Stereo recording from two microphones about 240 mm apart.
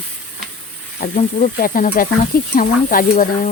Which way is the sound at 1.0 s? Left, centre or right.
Left.